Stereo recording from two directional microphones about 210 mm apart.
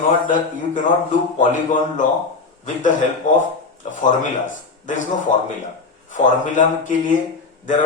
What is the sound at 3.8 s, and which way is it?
Speech, 35° left (ahead or behind).